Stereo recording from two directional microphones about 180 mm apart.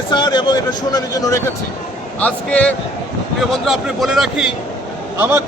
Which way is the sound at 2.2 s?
5° left (ahead or behind).